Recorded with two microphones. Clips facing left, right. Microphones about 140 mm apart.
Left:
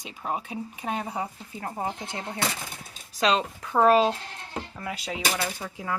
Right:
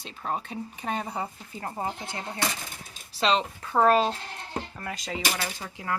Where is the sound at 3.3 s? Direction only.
10° left (ahead or behind).